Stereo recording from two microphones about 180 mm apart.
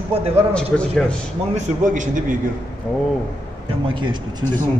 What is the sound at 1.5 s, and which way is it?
Speech, 45° right (ahead or behind).